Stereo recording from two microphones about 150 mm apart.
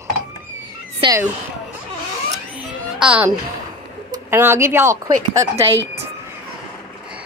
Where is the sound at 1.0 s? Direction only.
35° right (ahead or behind).